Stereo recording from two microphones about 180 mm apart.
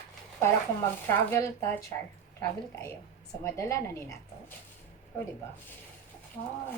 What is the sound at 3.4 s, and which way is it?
Speech, 15° left (ahead or behind).